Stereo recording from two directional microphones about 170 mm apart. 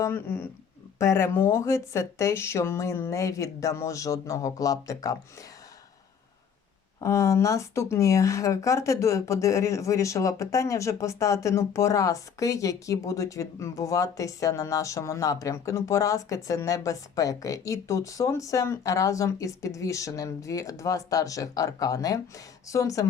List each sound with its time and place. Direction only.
0.0 s speech: 15° left (ahead or behind)
7.0 s speech: 15° left (ahead or behind)